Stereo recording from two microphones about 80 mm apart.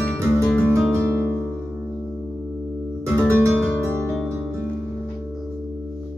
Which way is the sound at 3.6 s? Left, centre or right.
Centre.